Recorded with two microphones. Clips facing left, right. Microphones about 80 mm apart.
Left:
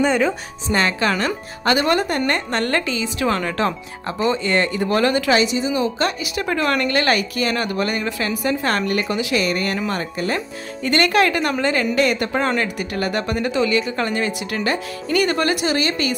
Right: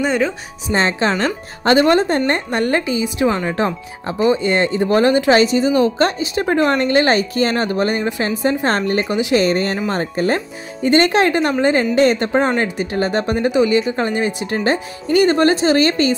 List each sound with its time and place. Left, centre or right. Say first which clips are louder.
0.0 s speech: even; centre
0.7 s speech: right 2 dB; right
5.3 s a woman's voice: right 5 dB; right
10.8 s a woman's voice: right 3 dB; right